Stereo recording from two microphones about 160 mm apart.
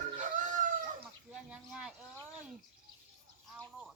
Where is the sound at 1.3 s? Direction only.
5° right (ahead or behind).